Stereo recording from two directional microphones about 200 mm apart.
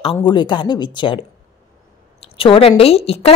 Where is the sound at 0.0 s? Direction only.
25° left (ahead or behind).